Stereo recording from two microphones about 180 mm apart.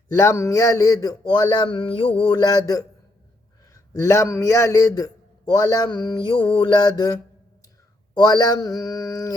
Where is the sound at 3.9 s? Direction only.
15° left (ahead or behind).